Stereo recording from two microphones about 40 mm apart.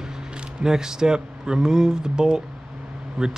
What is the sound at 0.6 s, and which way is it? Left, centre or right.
Speech, centre.